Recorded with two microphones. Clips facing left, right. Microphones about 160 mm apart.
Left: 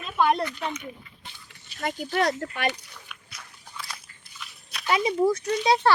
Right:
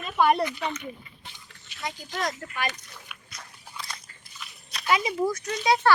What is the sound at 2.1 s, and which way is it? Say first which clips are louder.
Speech: left 7 dB; 65° left (ahead or behind).